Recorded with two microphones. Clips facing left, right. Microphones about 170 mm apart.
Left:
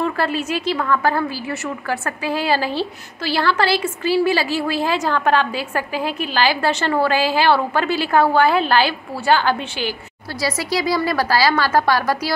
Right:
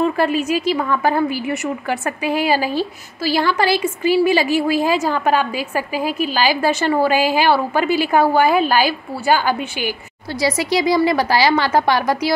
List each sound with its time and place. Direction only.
0.0 s a woman's voice: 15° right (ahead or behind)
10.4 s a woman's voice: 20° right (ahead or behind)